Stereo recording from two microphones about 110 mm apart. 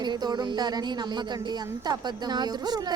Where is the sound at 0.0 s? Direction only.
40° right (ahead or behind).